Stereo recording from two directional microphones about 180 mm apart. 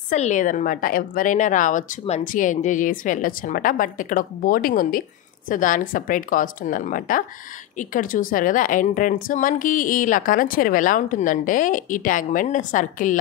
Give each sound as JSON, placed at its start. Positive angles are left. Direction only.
{"t": 0.1, "sound": "a woman's voice", "side_deg": 45}